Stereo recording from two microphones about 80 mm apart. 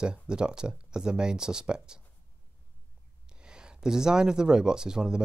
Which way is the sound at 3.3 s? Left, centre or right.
Centre.